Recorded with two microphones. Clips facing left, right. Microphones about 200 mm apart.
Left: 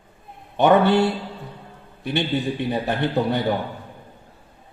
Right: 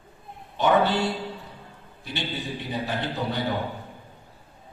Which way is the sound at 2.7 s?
60° left (ahead or behind).